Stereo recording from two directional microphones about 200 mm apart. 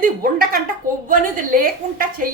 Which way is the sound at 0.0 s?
45° right (ahead or behind).